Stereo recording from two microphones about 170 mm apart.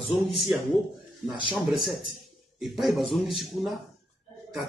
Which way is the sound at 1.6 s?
Centre (ahead or behind).